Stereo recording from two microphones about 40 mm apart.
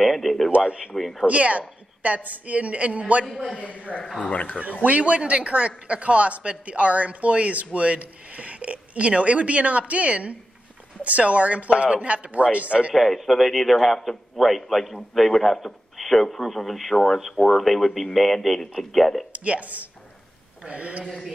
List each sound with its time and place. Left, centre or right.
0.0 s speech: centre
0.7 s a man's voice: right
0.9 s speech: centre
1.2 s a man's voice: right
3.5 s a woman's voice: left
4.8 s a man's voice: right
12.9 s a man's voice: centre
19.3 s a man's voice: right